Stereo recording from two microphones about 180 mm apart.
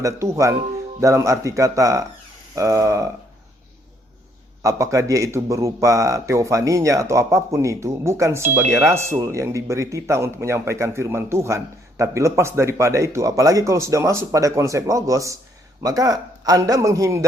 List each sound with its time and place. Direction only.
0.0 s speech: 15° right (ahead or behind)
4.6 s a man's voice: 15° right (ahead or behind)